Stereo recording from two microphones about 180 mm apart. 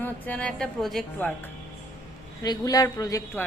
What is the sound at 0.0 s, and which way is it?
A woman's voice, 5° left (ahead or behind).